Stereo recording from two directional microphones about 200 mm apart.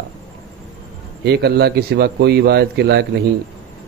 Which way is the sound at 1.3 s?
55° right (ahead or behind).